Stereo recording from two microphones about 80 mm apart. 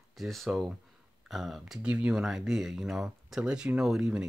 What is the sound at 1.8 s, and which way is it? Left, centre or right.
Speech, centre.